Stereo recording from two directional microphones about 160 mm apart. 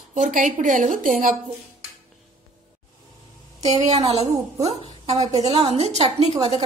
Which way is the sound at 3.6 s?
45° right (ahead or behind).